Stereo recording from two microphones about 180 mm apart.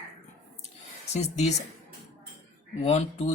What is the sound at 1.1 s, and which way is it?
Speech, 40° left (ahead or behind).